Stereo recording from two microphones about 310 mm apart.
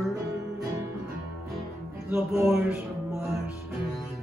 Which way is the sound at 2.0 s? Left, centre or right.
Centre.